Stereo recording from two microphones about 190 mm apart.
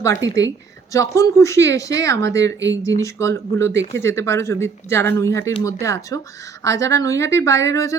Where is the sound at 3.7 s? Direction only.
65° right (ahead or behind).